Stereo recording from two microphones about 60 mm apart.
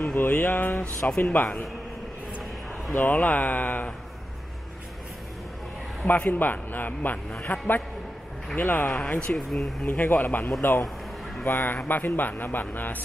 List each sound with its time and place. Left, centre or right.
0.0 s a man's voice: left
3.0 s speech: left
6.0 s a man's voice: left
8.5 s speech: left
9.0 s speech: centre
9.5 s speech: centre
9.8 s a man's voice: left